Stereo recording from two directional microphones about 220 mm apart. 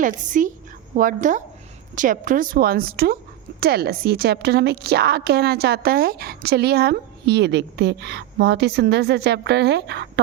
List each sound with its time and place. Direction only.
0.0 s a woman's voice: 35° right (ahead or behind)